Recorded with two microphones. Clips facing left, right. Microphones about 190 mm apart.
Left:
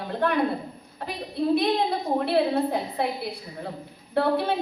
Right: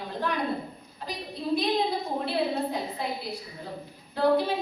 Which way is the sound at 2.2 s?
60° left (ahead or behind).